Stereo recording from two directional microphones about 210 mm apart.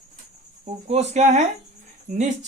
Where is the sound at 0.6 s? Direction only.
30° right (ahead or behind).